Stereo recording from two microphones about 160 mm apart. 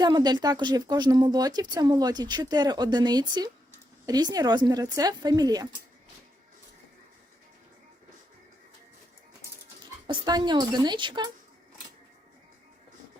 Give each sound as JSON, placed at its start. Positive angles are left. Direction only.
{"t": 0.0, "sound": "speech", "side_deg": -25}
{"t": 10.1, "sound": "speech", "side_deg": -25}